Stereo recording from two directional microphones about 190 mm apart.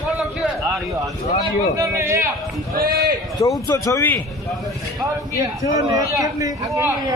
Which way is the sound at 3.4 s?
15° left (ahead or behind).